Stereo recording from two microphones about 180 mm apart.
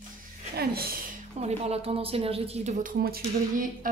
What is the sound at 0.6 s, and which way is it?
Speech, 55° right (ahead or behind).